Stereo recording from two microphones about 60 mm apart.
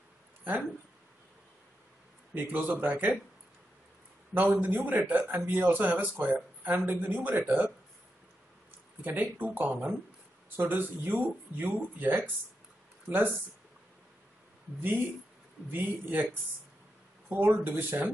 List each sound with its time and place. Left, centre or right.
0.4 s a sound: right
2.3 s speech: right
4.3 s a man's voice: right
9.0 s a man's voice: right
14.8 s speech: right
17.3 s speech: right